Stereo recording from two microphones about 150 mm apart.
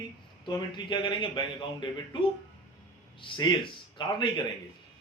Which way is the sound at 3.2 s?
30° left (ahead or behind).